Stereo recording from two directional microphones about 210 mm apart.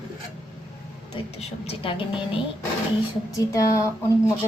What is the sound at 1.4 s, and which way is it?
Speech, 30° left (ahead or behind).